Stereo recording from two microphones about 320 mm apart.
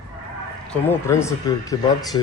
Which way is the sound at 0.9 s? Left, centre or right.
Centre.